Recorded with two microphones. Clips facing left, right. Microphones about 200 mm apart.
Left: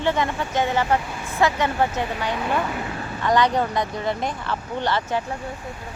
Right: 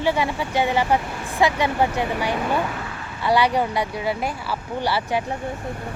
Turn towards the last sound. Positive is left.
turn(degrees=-10)  # may be behind; listen again after turning